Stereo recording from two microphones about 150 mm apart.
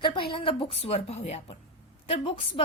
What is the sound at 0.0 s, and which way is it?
Speech, 35° left (ahead or behind).